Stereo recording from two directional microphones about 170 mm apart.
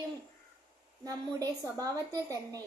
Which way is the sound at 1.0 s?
20° right (ahead or behind).